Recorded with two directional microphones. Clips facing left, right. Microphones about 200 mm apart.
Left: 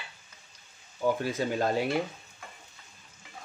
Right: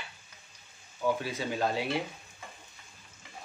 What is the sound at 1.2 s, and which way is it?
Speech, 45° left (ahead or behind).